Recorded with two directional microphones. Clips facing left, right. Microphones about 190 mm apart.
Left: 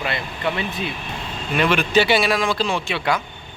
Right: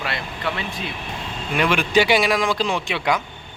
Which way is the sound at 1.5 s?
10° right (ahead or behind).